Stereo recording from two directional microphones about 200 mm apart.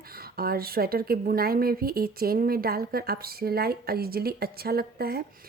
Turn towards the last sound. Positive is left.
turn(degrees=-50)  # may be behind; listen again after turning